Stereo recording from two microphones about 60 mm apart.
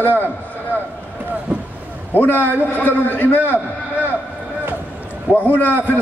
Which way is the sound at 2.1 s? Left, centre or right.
Left.